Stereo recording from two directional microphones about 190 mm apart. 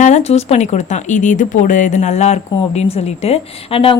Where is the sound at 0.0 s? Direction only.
35° left (ahead or behind).